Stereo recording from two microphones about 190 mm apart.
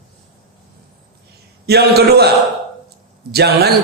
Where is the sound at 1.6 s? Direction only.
55° right (ahead or behind).